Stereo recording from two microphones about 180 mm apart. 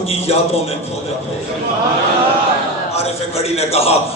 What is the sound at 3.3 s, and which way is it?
Speech, 35° left (ahead or behind).